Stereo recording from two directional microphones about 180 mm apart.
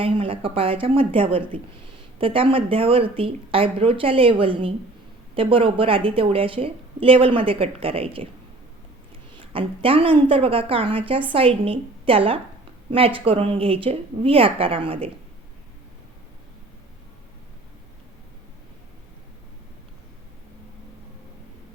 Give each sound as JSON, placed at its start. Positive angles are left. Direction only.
{"t": 0.0, "sound": "a woman's voice", "side_deg": -30}
{"t": 9.4, "sound": "a woman's voice", "side_deg": -30}